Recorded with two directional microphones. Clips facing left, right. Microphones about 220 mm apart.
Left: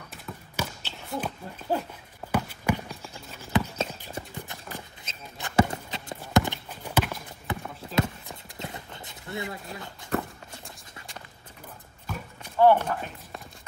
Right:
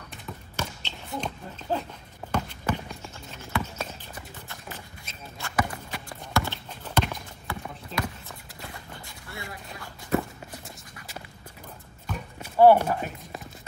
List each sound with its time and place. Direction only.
0.1 s a sound: 5° left (ahead or behind)
2.3 s horse: 10° left (ahead or behind)
3.5 s clip-clop: 20° left (ahead or behind); by 7.2 s 5° left (ahead or behind)
7.4 s clip-clop: 20° left (ahead or behind)
12.4 s clip-clop: 10° right (ahead or behind)